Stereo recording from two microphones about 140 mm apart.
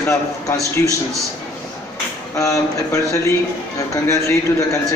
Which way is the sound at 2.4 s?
20° left (ahead or behind).